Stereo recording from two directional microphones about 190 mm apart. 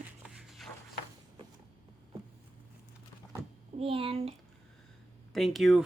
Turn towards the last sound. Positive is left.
turn(degrees=0)  # may be behind; listen again after turning